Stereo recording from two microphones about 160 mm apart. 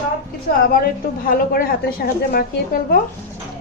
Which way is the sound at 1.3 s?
65° left (ahead or behind).